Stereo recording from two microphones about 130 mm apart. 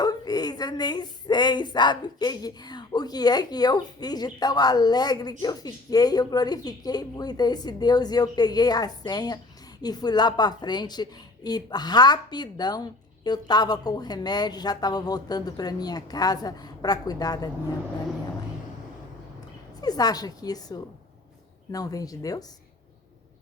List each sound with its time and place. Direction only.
0.0 s a woman's voice: 30° left (ahead or behind)
19.8 s speech: 30° left (ahead or behind)